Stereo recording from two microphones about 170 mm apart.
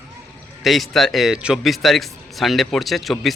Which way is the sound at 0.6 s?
Centre (ahead or behind).